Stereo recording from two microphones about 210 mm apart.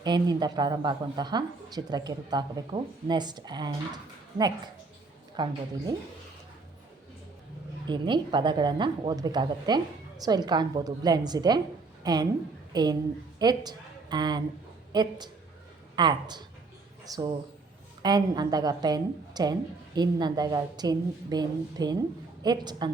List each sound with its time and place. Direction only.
0.0 s a woman's voice: 20° right (ahead or behind)
7.9 s a woman's voice: 20° right (ahead or behind)